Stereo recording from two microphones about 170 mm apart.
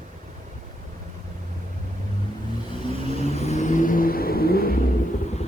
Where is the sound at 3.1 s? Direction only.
40° left (ahead or behind); by 4.7 s 60° left (ahead or behind).